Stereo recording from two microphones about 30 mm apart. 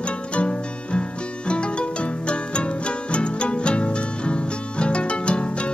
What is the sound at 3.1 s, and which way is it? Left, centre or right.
Music, left.